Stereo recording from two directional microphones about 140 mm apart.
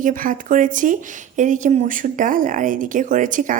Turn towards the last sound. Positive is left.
turn(degrees=-70)  # may be behind; listen again after turning